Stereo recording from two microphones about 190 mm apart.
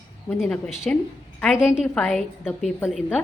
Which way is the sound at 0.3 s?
Centre (ahead or behind).